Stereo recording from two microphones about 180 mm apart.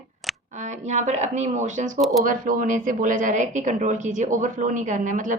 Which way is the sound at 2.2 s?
50° right (ahead or behind).